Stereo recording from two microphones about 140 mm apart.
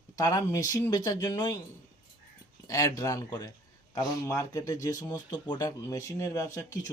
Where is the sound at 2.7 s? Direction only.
25° left (ahead or behind).